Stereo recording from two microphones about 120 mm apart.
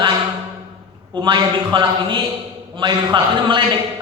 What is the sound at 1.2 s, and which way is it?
A man's voice, 40° right (ahead or behind).